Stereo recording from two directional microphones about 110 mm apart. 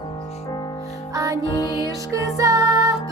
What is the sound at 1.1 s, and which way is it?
Music, 30° right (ahead or behind).